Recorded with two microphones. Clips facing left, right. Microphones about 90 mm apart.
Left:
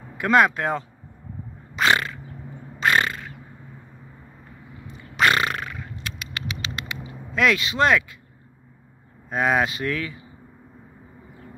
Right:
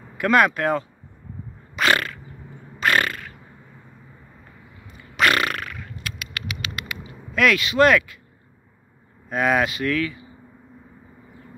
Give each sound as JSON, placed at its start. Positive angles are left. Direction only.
{"t": 0.2, "sound": "speech", "side_deg": 20}
{"t": 1.8, "sound": "crow", "side_deg": 20}
{"t": 4.8, "sound": "a sound", "side_deg": 30}
{"t": 9.3, "sound": "speech", "side_deg": 25}